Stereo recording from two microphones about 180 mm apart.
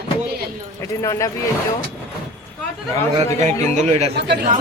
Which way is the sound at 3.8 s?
35° right (ahead or behind).